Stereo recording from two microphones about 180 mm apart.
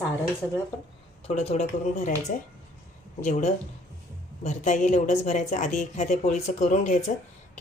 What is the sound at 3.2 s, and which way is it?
A woman's voice, 40° left (ahead or behind).